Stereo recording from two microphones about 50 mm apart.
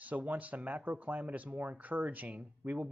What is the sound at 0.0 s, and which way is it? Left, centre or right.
Speech, right.